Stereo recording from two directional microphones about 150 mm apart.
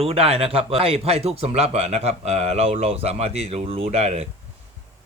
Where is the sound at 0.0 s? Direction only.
40° right (ahead or behind).